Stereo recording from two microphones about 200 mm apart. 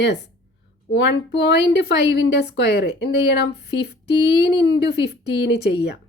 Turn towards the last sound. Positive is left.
turn(degrees=55)  # may be behind; listen again after turning